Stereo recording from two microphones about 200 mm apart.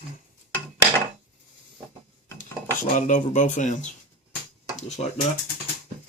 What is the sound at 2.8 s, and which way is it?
Speech, 40° left (ahead or behind).